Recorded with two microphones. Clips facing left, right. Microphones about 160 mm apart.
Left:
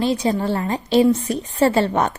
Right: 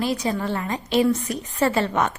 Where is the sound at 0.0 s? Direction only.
25° left (ahead or behind).